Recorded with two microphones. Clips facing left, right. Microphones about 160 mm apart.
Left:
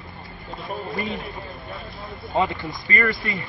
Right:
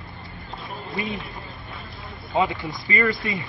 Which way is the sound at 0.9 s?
Centre (ahead or behind).